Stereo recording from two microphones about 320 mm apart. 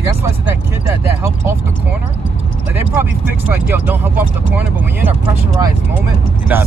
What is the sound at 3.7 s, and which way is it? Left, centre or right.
Speech, centre.